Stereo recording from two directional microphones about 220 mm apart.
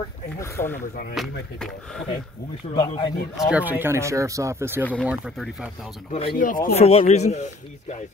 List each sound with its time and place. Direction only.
0.4 s speech: 10° left (ahead or behind)
1.1 s speech: centre (ahead or behind)
2.7 s speech: 20° left (ahead or behind)
3.3 s speech: 5° right (ahead or behind)
6.3 s speech: 40° left (ahead or behind)